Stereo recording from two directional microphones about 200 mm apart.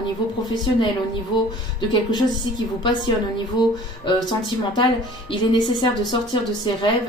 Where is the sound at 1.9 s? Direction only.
20° left (ahead or behind).